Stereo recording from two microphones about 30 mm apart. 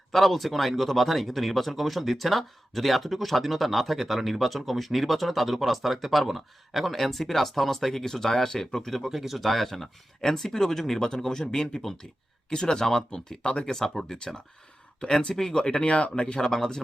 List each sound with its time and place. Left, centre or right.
0.1 s speech: centre
6.9 s speech: centre
9.0 s speech: centre
11.0 s speech: left
14.1 s speech: centre
15.8 s speech: left
16.4 s speech: centre